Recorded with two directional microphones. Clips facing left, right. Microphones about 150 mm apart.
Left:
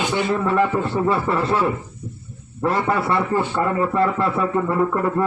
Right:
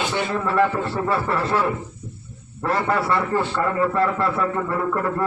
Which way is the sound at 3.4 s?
20° left (ahead or behind).